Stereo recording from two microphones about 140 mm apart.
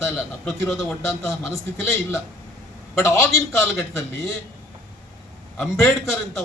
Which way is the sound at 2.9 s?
20° left (ahead or behind).